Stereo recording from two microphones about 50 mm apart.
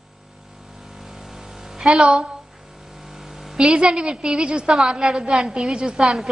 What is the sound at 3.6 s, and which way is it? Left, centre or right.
A woman's voice, centre.